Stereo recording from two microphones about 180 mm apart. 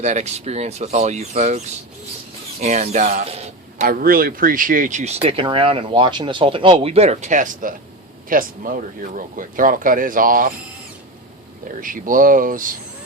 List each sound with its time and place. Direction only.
0.0 s speech: 40° right (ahead or behind)
3.8 s speech: 55° right (ahead or behind)
11.8 s speech: 50° right (ahead or behind)